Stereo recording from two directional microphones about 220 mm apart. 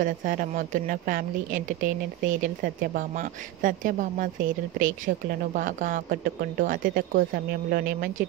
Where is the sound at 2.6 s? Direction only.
35° right (ahead or behind).